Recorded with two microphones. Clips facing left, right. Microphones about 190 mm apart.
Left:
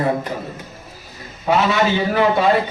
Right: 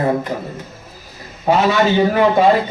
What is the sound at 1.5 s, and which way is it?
Speech, 40° right (ahead or behind).